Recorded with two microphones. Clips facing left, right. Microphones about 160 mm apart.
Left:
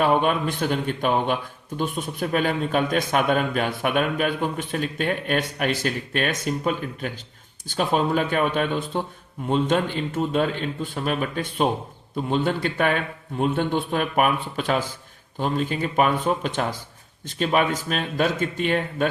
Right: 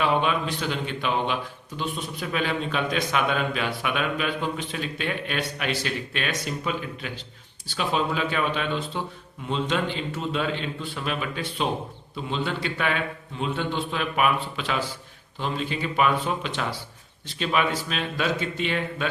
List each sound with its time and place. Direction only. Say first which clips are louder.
0.0 s a man's voice: left 3 dB; 50° left (ahead or behind)